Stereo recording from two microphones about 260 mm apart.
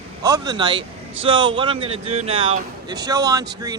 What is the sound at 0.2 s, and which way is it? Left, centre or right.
Speech, centre.